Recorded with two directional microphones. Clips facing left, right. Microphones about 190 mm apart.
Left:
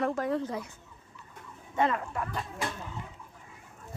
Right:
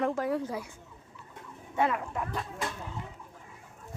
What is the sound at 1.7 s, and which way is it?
Speech, 10° right (ahead or behind).